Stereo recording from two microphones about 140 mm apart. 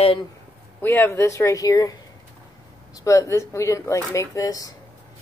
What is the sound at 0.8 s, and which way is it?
A woman's voice, 15° left (ahead or behind).